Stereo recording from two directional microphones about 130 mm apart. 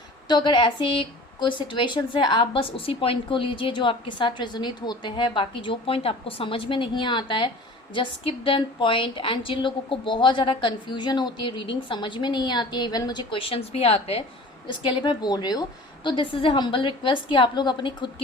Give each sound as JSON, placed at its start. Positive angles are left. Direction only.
{"t": 0.3, "sound": "a woman's voice", "side_deg": 35}
{"t": 14.7, "sound": "a woman's voice", "side_deg": 40}